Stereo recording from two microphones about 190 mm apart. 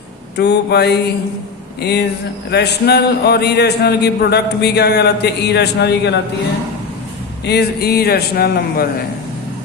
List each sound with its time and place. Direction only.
0.3 s a man's voice: 60° left (ahead or behind)
7.4 s a man's voice: 60° left (ahead or behind)